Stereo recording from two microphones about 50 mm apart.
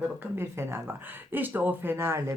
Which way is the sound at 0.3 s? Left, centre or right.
Right.